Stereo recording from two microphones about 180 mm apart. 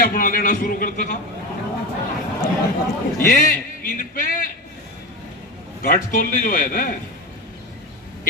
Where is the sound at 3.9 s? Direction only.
55° left (ahead or behind).